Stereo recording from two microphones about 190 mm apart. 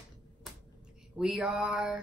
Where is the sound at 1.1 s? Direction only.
5° right (ahead or behind).